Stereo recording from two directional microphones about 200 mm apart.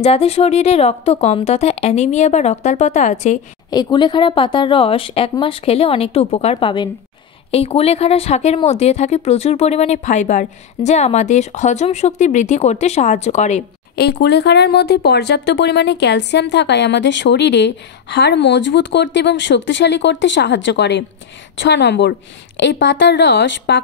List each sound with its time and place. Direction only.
0.0 s speech: 30° left (ahead or behind)
3.7 s a woman's voice: 20° left (ahead or behind)
13.9 s speech: 55° left (ahead or behind)